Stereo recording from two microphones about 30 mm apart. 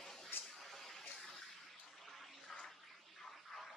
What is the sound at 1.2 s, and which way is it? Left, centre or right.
Bathtub, centre.